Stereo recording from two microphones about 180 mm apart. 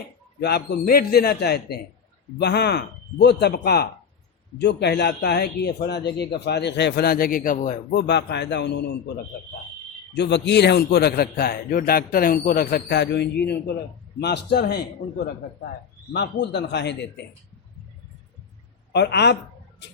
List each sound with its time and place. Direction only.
0.3 s a man's voice: 65° left (ahead or behind); by 7.9 s 50° left (ahead or behind)
7.9 s speech: 70° left (ahead or behind)
10.2 s a man's voice: 75° left (ahead or behind)
16.1 s speech: 70° left (ahead or behind)
18.9 s speech: 70° left (ahead or behind)